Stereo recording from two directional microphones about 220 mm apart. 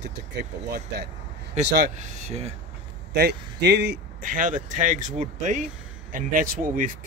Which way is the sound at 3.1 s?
50° right (ahead or behind).